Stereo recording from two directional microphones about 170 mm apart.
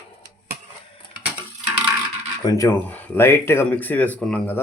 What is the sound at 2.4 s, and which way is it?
Speech, 20° left (ahead or behind).